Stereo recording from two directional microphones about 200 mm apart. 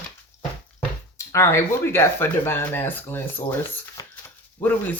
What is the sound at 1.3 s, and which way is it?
Speech, 15° left (ahead or behind).